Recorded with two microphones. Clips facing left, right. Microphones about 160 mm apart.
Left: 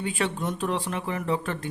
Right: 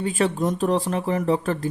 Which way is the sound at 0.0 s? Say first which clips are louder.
Right 6 dB; 40° right (ahead or behind).